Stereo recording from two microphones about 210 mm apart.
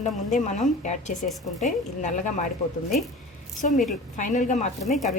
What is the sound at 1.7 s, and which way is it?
Speech, 35° left (ahead or behind).